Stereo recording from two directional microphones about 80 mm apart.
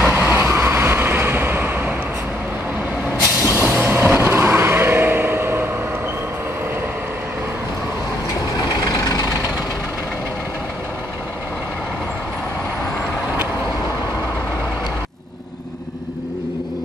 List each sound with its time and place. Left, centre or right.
0.1 s vehicle: right
3.4 s vehicle: right
8.6 s vehicle: left